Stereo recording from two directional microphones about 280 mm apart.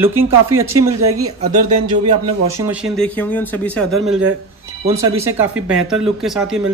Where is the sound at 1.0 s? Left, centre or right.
Right.